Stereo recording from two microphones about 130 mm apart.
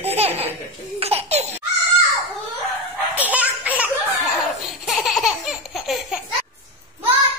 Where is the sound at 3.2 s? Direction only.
10° right (ahead or behind).